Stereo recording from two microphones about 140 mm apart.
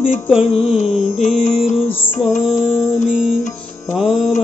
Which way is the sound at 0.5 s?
45° left (ahead or behind).